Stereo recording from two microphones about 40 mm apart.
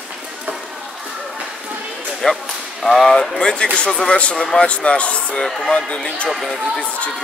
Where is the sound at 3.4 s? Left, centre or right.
Left.